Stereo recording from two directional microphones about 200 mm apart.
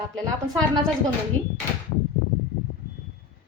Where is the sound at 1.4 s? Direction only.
25° right (ahead or behind).